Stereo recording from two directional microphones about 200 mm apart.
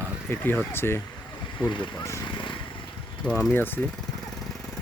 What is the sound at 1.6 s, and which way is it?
Speech, 20° left (ahead or behind).